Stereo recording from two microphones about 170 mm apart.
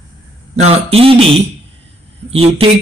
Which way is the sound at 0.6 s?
35° right (ahead or behind).